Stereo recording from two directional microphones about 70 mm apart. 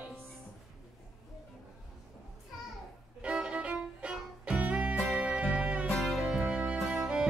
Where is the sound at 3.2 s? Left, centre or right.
Centre.